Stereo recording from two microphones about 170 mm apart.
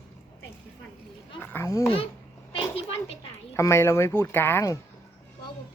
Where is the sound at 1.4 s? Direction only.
15° left (ahead or behind).